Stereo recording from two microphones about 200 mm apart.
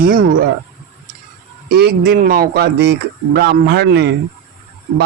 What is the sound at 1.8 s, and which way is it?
Speech, 55° right (ahead or behind).